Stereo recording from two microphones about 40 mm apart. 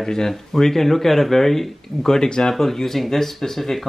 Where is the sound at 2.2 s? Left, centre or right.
Left.